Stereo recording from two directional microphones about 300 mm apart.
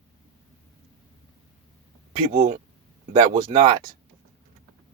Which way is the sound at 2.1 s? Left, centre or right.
Right.